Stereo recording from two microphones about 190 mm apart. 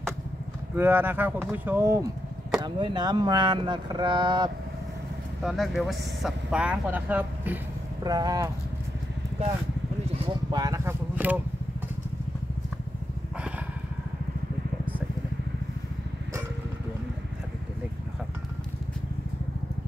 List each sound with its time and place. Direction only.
0.7 s speech: 10° right (ahead or behind)
5.4 s speech: centre (ahead or behind)
8.0 s speech: 20° right (ahead or behind)
10.2 s speech: 20° right (ahead or behind)